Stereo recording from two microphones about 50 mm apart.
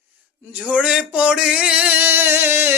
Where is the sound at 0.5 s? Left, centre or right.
Right.